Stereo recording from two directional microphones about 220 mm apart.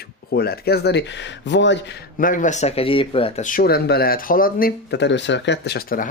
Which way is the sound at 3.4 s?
40° left (ahead or behind).